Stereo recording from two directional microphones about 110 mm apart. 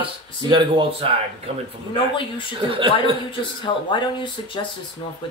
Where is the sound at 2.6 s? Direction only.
50° right (ahead or behind).